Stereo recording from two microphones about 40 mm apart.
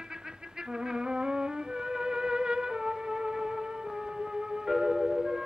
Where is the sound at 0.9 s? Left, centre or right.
Centre.